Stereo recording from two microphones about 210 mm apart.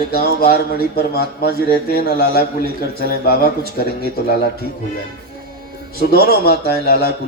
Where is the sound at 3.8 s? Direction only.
50° left (ahead or behind).